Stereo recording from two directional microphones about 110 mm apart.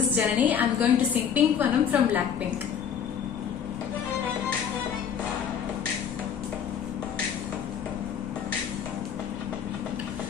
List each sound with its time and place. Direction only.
0.1 s a woman's voice: 15° right (ahead or behind)